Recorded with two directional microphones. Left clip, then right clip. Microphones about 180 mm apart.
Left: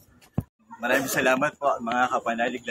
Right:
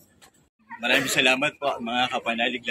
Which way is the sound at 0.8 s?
15° right (ahead or behind).